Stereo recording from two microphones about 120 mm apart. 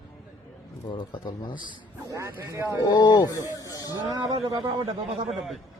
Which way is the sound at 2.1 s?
20° right (ahead or behind).